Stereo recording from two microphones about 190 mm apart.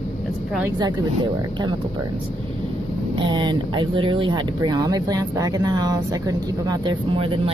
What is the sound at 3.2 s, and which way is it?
Speech, 25° right (ahead or behind).